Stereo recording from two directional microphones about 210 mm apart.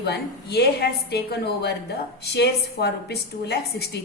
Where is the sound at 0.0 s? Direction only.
50° left (ahead or behind).